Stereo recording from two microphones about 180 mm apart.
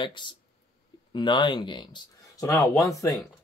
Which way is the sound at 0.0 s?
25° left (ahead or behind).